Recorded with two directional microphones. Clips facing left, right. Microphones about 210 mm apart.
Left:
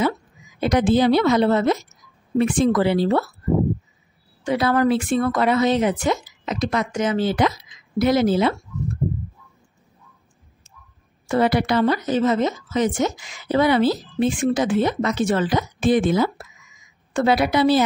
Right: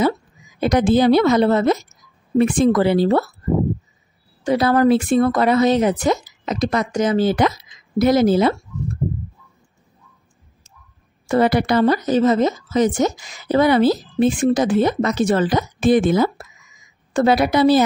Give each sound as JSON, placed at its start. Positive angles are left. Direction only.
{"t": 0.6, "sound": "a woman's voice", "side_deg": -45}
{"t": 4.5, "sound": "speech", "side_deg": -40}
{"t": 11.2, "sound": "a woman's voice", "side_deg": -45}